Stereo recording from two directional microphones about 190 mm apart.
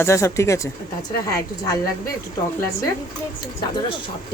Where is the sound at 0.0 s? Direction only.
15° left (ahead or behind).